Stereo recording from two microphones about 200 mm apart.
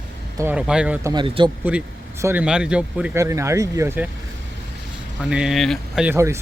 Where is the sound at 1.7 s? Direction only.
10° right (ahead or behind).